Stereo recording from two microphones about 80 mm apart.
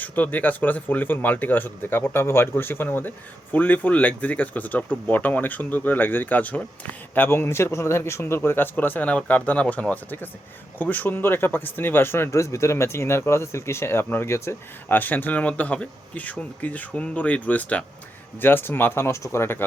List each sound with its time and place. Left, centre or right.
0.0 s speech: left
14.9 s speech: left